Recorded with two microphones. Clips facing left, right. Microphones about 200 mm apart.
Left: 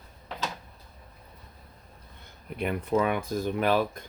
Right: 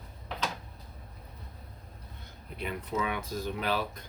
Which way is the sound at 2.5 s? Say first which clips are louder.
Left 7 dB; 55° left (ahead or behind).